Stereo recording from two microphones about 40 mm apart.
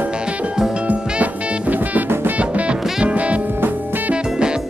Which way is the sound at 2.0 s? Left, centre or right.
Right.